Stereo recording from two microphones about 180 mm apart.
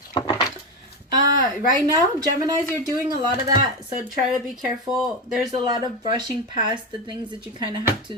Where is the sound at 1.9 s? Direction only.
20° right (ahead or behind).